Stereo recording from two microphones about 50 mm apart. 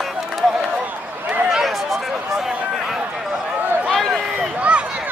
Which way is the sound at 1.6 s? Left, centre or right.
Centre.